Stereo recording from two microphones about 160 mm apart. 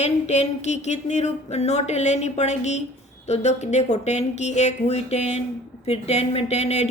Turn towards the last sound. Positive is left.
turn(degrees=45)  # may be behind; listen again after turning